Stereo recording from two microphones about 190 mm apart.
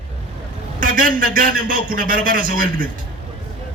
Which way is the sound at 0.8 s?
45° right (ahead or behind).